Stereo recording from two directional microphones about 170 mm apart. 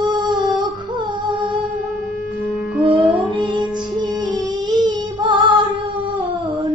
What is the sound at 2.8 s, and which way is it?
Music, 30° right (ahead or behind).